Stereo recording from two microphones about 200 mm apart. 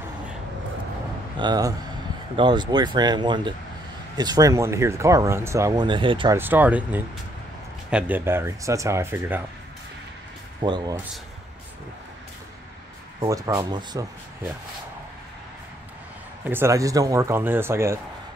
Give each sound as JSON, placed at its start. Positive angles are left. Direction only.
{"t": 1.4, "sound": "speech", "side_deg": -20}
{"t": 6.3, "sound": "speech", "side_deg": -10}
{"t": 10.6, "sound": "speech", "side_deg": -20}
{"t": 13.2, "sound": "speech", "side_deg": -20}
{"t": 16.4, "sound": "speech", "side_deg": -10}